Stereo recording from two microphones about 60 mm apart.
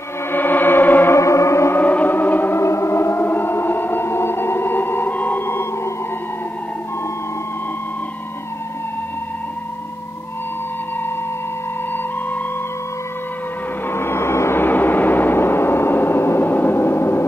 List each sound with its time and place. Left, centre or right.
0.3 s gong: left
1.1 s music: left
1.8 s music: left
2.6 s music: left
13.8 s a sound: left